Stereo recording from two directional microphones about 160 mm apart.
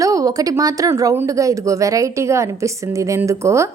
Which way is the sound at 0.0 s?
20° right (ahead or behind).